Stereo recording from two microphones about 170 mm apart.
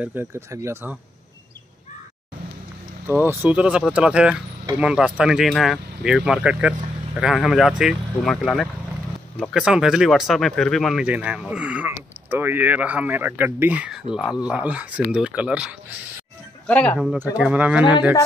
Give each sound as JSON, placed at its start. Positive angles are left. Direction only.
{"t": 0.0, "sound": "speech", "side_deg": -15}
{"t": 3.1, "sound": "speech", "side_deg": -10}
{"t": 16.6, "sound": "speech", "side_deg": 10}